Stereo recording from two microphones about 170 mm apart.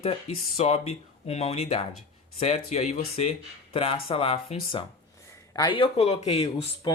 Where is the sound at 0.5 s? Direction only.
40° left (ahead or behind).